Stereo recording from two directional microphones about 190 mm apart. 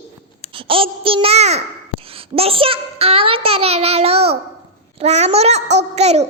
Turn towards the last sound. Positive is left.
turn(degrees=-35)  # may be behind; listen again after turning